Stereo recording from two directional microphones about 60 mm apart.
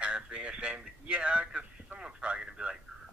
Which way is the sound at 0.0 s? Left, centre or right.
Centre.